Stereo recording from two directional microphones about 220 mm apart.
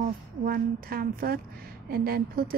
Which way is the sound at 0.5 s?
40° right (ahead or behind).